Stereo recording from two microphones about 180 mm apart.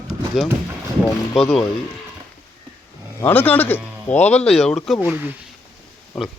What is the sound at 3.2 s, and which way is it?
Speech, 10° left (ahead or behind).